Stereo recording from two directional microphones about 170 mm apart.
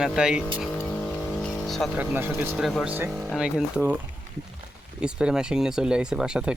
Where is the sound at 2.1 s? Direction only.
15° right (ahead or behind).